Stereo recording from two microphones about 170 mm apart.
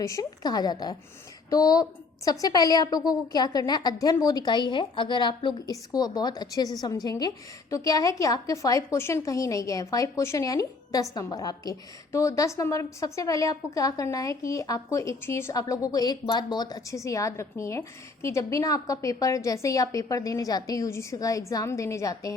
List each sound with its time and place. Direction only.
0.0 s a woman's voice: 20° left (ahead or behind)